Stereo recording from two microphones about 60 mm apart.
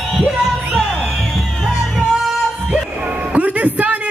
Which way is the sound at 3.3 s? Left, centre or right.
Right.